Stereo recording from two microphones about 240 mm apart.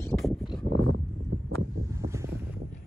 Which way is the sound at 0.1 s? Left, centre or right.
Centre.